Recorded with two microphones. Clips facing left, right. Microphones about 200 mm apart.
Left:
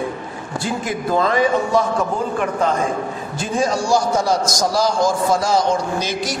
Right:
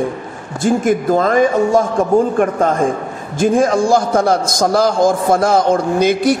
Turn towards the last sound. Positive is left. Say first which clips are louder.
# right 10 dB
turn(degrees=-55)  # may be behind; listen again after turning